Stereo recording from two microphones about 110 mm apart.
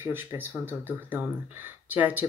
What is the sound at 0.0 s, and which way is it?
Speech, 20° right (ahead or behind).